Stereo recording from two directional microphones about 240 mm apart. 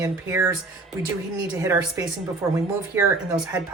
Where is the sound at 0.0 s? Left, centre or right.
Centre.